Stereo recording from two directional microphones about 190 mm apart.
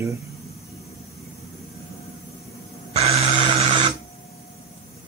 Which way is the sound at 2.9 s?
35° right (ahead or behind).